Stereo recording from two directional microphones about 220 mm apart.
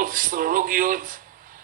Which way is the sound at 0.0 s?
40° right (ahead or behind).